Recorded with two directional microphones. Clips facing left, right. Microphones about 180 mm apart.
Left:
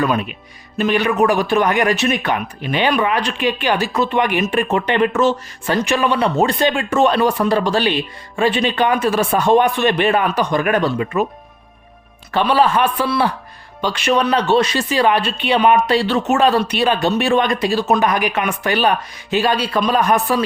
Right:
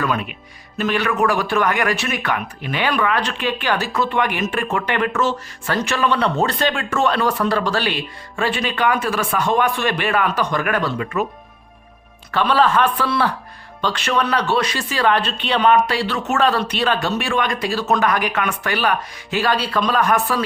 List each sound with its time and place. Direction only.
0.8 s speech: 15° left (ahead or behind)
12.3 s speech: 15° left (ahead or behind)
16.0 s speech: 25° left (ahead or behind)
16.3 s speech: 15° left (ahead or behind)